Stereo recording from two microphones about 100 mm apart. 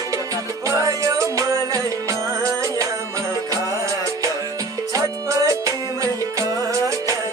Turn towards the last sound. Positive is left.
turn(degrees=-35)  # may be behind; listen again after turning